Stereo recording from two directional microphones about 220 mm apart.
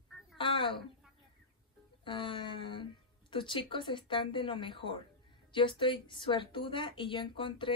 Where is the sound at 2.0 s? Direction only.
20° left (ahead or behind).